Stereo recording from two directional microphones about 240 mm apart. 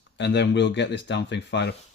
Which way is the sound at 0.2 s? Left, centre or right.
Left.